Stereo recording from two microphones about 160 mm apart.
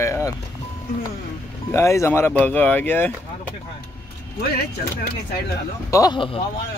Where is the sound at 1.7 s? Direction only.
15° left (ahead or behind).